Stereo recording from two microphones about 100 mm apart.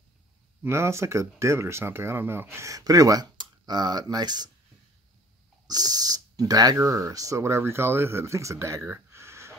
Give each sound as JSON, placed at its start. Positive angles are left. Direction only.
{"t": 0.7, "sound": "speech", "side_deg": -25}
{"t": 5.7, "sound": "speech", "side_deg": -40}